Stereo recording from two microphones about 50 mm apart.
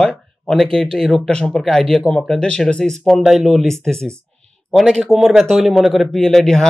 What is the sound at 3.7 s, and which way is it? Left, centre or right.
Speech, centre.